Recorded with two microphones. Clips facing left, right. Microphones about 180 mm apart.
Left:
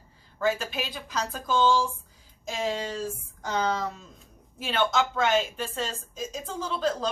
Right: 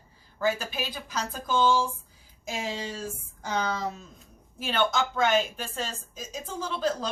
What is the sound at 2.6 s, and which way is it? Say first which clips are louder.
Speech: left 6 dB; 55° left (ahead or behind).